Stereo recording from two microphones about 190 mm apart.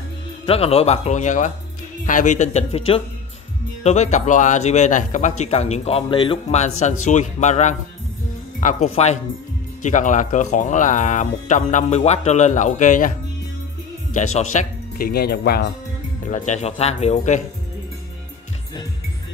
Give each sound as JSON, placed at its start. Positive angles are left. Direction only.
{"t": 0.5, "sound": "speech", "side_deg": 30}
{"t": 14.5, "sound": "speech", "side_deg": 45}
{"t": 16.3, "sound": "speech", "side_deg": 40}